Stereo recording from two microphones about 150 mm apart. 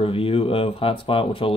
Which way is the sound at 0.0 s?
40° left (ahead or behind).